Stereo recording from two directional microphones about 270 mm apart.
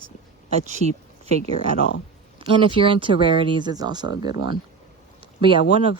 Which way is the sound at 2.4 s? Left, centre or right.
Centre.